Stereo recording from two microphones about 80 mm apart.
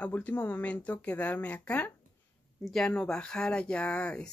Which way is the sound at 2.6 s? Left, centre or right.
Centre.